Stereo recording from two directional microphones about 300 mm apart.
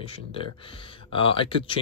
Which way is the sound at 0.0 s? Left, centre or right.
Centre.